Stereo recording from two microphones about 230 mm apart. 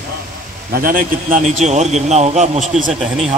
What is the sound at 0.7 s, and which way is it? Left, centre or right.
A man's voice, right.